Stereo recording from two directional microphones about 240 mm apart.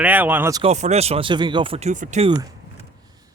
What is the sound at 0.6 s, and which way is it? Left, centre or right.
Speech, right.